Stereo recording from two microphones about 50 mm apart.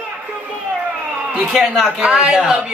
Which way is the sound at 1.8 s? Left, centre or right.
Centre.